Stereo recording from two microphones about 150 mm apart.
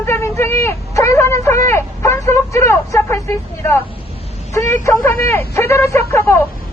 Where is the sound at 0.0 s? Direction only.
15° left (ahead or behind).